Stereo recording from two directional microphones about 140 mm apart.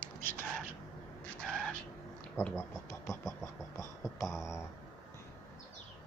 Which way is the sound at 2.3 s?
15° left (ahead or behind).